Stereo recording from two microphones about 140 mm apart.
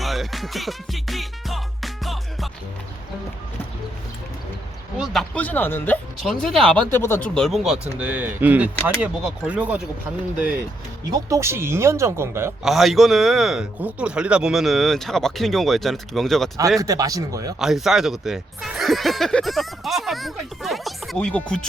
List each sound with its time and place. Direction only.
0.0 s music: centre (ahead or behind)
4.9 s speech: centre (ahead or behind); by 7.3 s 15° left (ahead or behind)
7.3 s speech: centre (ahead or behind)
11.1 s speech: 20° right (ahead or behind)
12.6 s speech: centre (ahead or behind)
16.8 s speech: 25° right (ahead or behind)
17.6 s speech: centre (ahead or behind)